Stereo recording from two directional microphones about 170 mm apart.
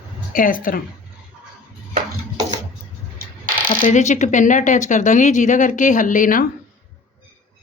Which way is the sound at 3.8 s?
45° left (ahead or behind).